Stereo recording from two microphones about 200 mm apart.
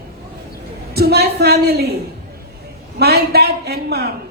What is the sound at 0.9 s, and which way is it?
Speech, 55° right (ahead or behind).